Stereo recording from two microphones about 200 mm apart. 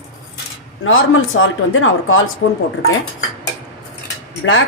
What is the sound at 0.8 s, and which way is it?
Speech, 85° left.